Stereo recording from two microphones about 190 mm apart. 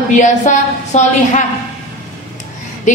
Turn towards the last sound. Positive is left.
turn(degrees=40)  # may be behind; listen again after turning